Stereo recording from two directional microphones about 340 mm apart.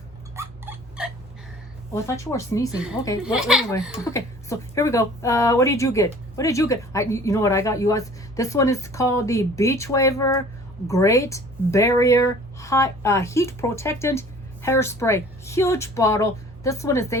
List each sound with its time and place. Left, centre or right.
0.3 s rodents: centre
1.9 s a woman's voice: centre
3.2 s speech: centre
3.7 s a woman's voice: centre